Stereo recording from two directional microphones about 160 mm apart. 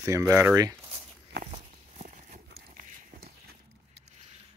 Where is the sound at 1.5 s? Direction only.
45° right (ahead or behind).